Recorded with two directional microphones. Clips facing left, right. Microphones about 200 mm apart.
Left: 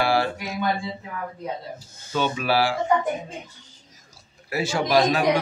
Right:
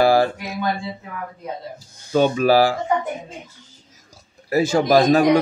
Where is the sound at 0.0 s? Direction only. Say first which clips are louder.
Right 6 dB; 40° right (ahead or behind).